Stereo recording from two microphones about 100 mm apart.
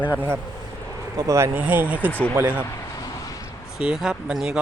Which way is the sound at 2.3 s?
20° right (ahead or behind).